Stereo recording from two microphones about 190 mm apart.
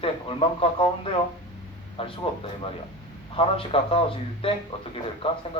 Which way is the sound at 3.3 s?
30° left (ahead or behind).